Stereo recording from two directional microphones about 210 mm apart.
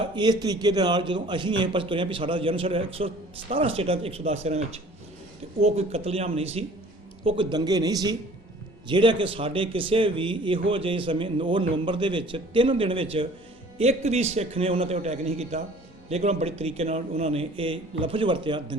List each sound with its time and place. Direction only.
0.0 s a man's voice: 20° right (ahead or behind)